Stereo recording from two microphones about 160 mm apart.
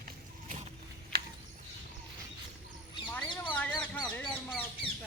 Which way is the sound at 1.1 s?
70° right (ahead or behind).